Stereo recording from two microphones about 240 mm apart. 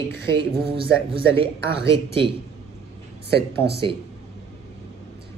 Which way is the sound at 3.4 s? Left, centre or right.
Right.